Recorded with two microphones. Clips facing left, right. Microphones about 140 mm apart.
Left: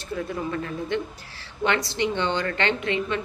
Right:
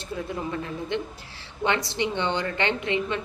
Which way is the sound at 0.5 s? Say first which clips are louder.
Left 2 dB; 20° right (ahead or behind).